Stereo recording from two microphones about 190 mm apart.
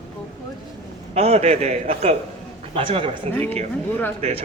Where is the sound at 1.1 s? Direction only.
35° right (ahead or behind).